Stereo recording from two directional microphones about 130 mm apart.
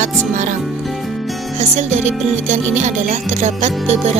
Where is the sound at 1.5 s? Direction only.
60° right (ahead or behind).